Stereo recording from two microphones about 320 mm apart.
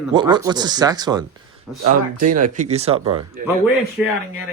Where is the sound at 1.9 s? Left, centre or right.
Right.